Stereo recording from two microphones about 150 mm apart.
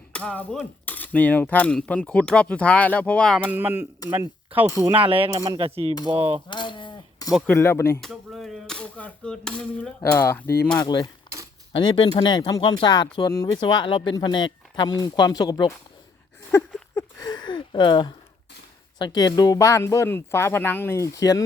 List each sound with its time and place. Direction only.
0.1 s a sound: 10° left (ahead or behind)
0.9 s speech: 10° left (ahead or behind)
3.5 s speech: 10° right (ahead or behind)
4.9 s speech: 35° right (ahead or behind)
6.5 s sheep: 30° left (ahead or behind)
7.5 s speech: 15° left (ahead or behind)
8.0 s a sound: centre (ahead or behind)
10.2 s speech: 15° left (ahead or behind)
10.8 s speech: 25° left (ahead or behind)
13.3 s speech: 20° left (ahead or behind)
13.6 s speech: 30° left (ahead or behind)
16.9 s a sound: 25° left (ahead or behind)
18.9 s speech: 30° left (ahead or behind)